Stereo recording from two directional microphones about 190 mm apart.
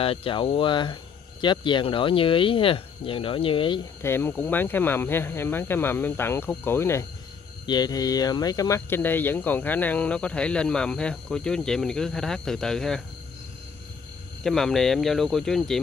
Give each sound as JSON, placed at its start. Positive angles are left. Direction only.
{"t": 0.0, "sound": "speech", "side_deg": 30}
{"t": 4.0, "sound": "speech", "side_deg": 10}
{"t": 14.4, "sound": "speech", "side_deg": 0}